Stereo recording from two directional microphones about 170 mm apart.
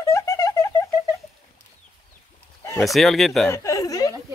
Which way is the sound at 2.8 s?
Centre (ahead or behind).